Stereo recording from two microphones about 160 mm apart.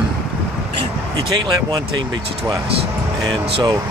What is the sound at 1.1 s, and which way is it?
Speech, 30° right (ahead or behind).